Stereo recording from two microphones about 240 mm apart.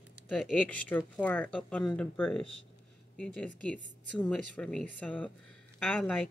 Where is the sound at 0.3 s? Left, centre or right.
Centre.